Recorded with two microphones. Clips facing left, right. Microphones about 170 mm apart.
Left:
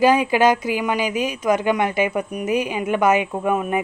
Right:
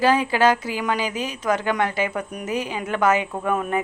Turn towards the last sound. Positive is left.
turn(degrees=10)  # may be behind; listen again after turning